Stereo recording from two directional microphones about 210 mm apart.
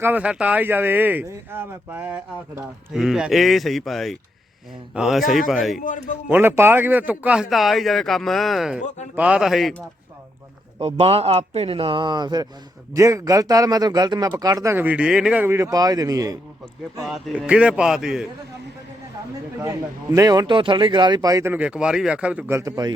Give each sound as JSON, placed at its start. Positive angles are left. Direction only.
{"t": 0.0, "sound": "a man's voice", "side_deg": -5}
{"t": 5.8, "sound": "a man's voice", "side_deg": 40}
{"t": 6.3, "sound": "a man's voice", "side_deg": -10}
{"t": 8.8, "sound": "a man's voice", "side_deg": 35}
{"t": 9.1, "sound": "a man's voice", "side_deg": -5}
{"t": 10.8, "sound": "a man's voice", "side_deg": -25}
{"t": 17.0, "sound": "a man's voice", "side_deg": 0}
{"t": 19.5, "sound": "speech", "side_deg": -15}